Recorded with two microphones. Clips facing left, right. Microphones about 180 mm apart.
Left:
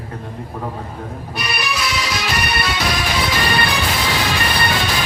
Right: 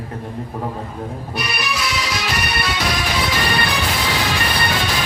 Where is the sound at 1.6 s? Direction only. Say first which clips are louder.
Left 2 dB; 65° left (ahead or behind).